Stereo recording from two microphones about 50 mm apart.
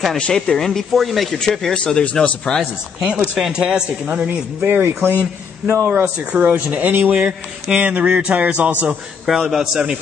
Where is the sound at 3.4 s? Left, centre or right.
Centre.